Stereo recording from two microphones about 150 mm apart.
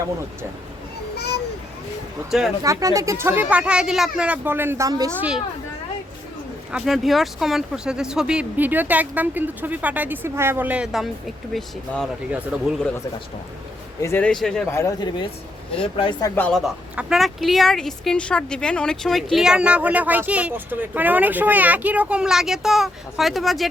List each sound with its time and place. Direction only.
1.1 s a sound: 90° left
2.3 s a woman's voice: centre (ahead or behind)
2.6 s speech: 20° right (ahead or behind)
6.7 s speech: 5° right (ahead or behind)
14.0 s a man's voice: 15° left (ahead or behind)
14.3 s a woman's voice: 5° left (ahead or behind)
14.7 s speech: 20° left (ahead or behind)
15.7 s speech: 35° left (ahead or behind)
16.3 s a woman's voice: 5° left (ahead or behind)